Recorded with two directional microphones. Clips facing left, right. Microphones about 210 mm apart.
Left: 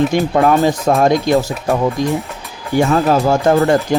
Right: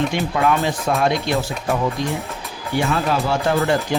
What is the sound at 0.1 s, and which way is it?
Speech, 40° left (ahead or behind).